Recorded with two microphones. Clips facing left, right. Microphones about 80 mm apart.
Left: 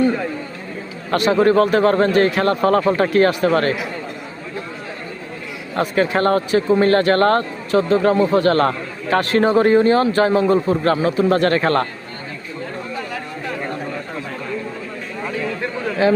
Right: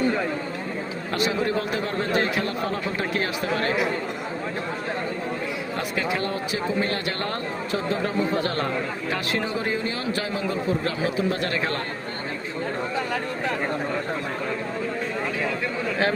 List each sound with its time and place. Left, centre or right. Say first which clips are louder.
1.1 s speech: left 10 dB; left
3.0 s speech: left 11 dB; left
5.7 s speech: left 11 dB; left